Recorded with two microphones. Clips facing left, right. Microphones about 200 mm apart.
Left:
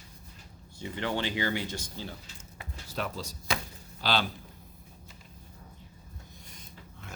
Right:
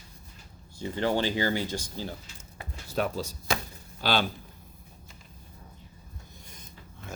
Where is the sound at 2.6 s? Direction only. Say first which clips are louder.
Right 6 dB; 45° right (ahead or behind).